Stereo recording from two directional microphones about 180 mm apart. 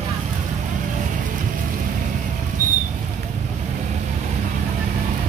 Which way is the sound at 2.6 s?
45° right (ahead or behind).